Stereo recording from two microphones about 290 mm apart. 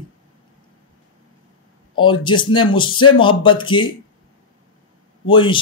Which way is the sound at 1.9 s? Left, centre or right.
Centre.